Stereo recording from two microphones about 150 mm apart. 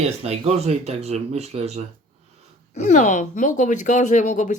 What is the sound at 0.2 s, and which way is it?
Speech, 45° right (ahead or behind).